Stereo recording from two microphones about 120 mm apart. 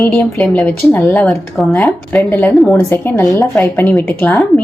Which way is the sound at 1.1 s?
5° left (ahead or behind).